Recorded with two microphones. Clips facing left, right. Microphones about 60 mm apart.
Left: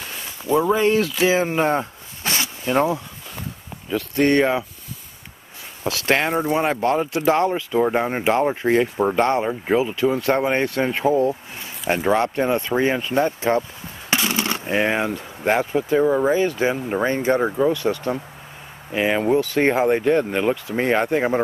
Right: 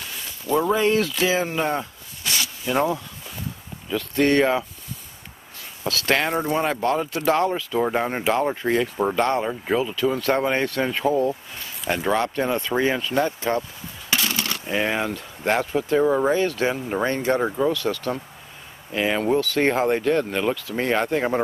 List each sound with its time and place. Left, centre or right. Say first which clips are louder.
0.5 s speech: left 2 dB; centre
1.5 s a sound: left 4 dB; left
2.6 s speech: left 3 dB; centre
4.1 s speech: left 1 dB; centre
5.9 s speech: left 2 dB; centre
8.2 s speech: left 3 dB; left
9.0 s speech: left 3 dB; centre
11.1 s a sound: left 2 dB; left
12.4 s speech: left 2 dB; centre
13.1 s speech: left 3 dB; left